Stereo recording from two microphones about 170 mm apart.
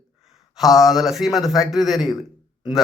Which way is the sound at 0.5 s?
Centre (ahead or behind).